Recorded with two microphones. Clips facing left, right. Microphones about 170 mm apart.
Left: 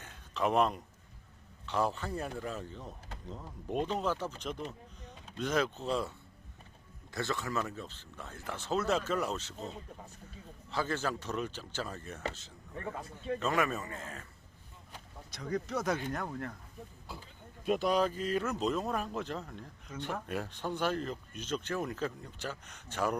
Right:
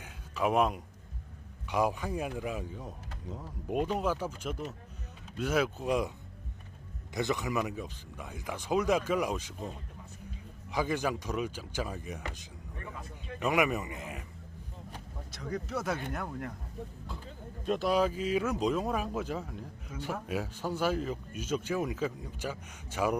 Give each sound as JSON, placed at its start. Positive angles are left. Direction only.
{"t": 0.0, "sound": "a sound", "side_deg": -10}
{"t": 1.6, "sound": "speech", "side_deg": -10}
{"t": 12.8, "sound": "a man's voice", "side_deg": 30}
{"t": 13.4, "sound": "speech", "side_deg": -15}
{"t": 15.3, "sound": "speech", "side_deg": 0}
{"t": 17.7, "sound": "speech", "side_deg": 0}